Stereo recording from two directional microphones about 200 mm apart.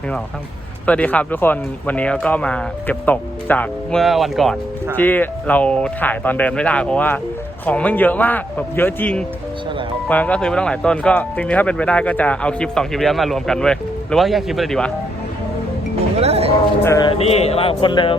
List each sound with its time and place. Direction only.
0.9 s speech: 5° left (ahead or behind)
16.1 s music: 30° right (ahead or behind)
16.8 s speech: 15° left (ahead or behind)
17.1 s speech: 30° left (ahead or behind)